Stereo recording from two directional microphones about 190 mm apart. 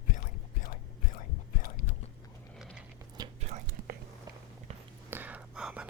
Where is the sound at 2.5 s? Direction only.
Centre (ahead or behind).